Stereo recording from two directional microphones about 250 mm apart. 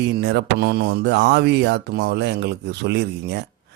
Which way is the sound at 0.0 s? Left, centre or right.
Right.